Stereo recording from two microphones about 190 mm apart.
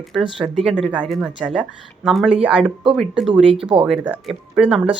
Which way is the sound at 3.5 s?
30° right (ahead or behind).